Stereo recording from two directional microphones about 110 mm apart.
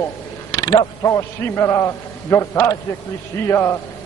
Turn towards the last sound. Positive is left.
turn(degrees=25)  # may be behind; listen again after turning